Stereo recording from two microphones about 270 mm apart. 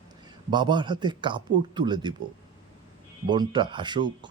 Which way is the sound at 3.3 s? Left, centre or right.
Centre.